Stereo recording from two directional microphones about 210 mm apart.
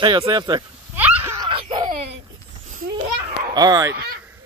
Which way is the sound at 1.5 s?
25° right (ahead or behind).